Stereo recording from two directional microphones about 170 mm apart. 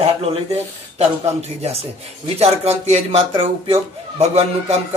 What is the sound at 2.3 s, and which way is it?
Speech, 40° right (ahead or behind).